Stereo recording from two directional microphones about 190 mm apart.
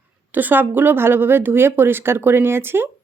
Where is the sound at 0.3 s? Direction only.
10° right (ahead or behind).